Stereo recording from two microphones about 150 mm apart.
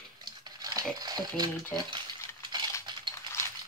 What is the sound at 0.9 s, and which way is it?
Speech, 25° right (ahead or behind).